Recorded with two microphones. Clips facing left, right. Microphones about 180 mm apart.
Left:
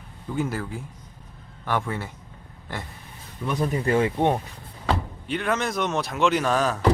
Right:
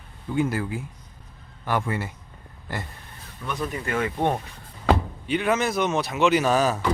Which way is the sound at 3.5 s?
35° left (ahead or behind).